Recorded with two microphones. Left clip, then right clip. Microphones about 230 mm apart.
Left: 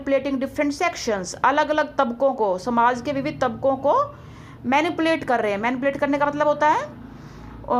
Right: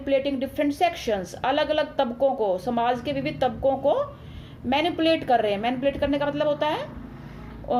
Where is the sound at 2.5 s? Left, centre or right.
Left.